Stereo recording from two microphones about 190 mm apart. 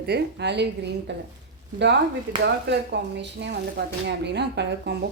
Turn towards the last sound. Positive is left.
turn(degrees=-60)  # may be behind; listen again after turning